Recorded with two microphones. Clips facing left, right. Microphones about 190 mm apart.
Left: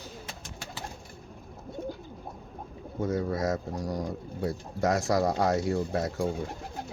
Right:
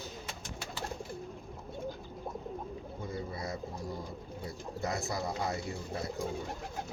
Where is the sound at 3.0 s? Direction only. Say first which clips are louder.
Left 12 dB; 85° left.